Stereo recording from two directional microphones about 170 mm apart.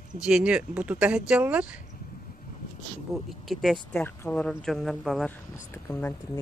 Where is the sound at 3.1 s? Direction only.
Centre (ahead or behind).